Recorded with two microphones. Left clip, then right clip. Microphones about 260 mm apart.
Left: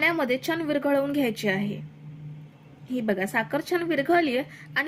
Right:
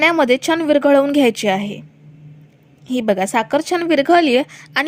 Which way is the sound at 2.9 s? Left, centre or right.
Right.